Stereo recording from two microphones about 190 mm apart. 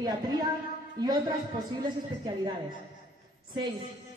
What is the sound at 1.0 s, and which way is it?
Speech, 20° right (ahead or behind).